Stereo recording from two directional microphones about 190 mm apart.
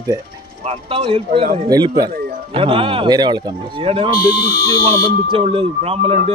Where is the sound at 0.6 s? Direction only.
30° right (ahead or behind).